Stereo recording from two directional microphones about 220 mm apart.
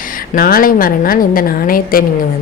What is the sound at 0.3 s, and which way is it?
A woman's voice, 40° left (ahead or behind).